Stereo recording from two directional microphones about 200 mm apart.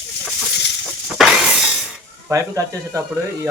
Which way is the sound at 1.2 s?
Centre (ahead or behind).